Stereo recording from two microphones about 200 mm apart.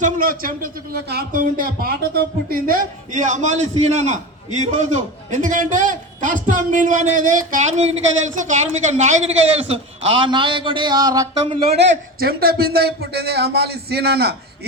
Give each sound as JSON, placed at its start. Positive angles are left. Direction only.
{"t": 0.0, "sound": "a man's voice", "side_deg": -45}
{"t": 11.8, "sound": "speech", "side_deg": -55}